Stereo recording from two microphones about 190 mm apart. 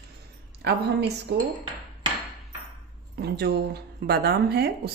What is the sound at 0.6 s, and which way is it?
Speech, 60° right (ahead or behind).